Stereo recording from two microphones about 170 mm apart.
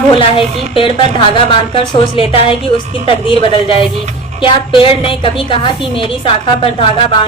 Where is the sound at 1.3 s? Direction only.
30° left (ahead or behind).